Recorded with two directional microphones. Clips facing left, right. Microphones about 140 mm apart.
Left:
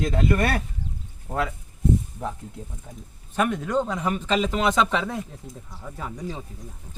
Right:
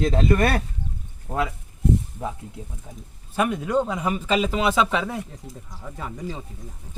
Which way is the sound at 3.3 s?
10° right (ahead or behind).